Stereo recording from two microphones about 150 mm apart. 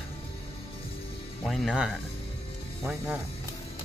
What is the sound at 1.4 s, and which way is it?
Speech, centre (ahead or behind).